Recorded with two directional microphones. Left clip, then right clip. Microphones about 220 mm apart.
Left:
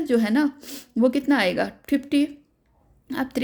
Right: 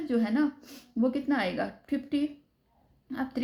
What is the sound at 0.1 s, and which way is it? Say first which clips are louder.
Speech: left 6 dB; 45° left (ahead or behind).